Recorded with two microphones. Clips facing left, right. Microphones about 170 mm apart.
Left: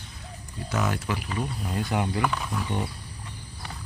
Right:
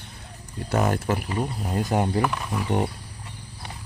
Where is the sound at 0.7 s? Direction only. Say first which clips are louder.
Right 5 dB; 50° right (ahead or behind).